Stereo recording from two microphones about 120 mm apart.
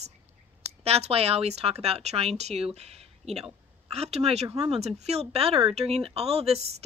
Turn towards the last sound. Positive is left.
turn(degrees=-55)  # may be behind; listen again after turning